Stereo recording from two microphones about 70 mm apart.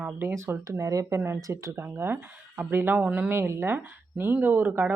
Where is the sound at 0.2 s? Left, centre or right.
Right.